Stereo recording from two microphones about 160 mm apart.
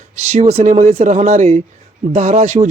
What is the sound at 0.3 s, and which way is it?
Speech, 45° right (ahead or behind).